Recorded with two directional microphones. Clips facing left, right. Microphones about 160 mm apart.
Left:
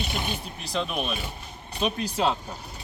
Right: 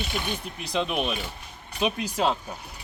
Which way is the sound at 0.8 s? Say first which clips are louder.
Right 3 dB; 15° right (ahead or behind).